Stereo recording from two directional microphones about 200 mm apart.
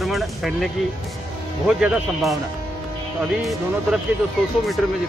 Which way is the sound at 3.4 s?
Centre (ahead or behind).